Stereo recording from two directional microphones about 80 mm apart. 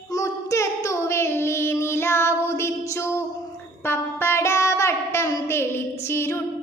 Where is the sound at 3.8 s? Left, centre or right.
Left.